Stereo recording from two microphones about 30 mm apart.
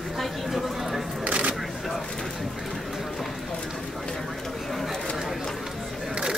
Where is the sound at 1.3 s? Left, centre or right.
Right.